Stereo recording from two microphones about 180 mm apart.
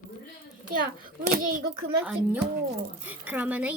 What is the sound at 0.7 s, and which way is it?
A child's voice, 50° right (ahead or behind).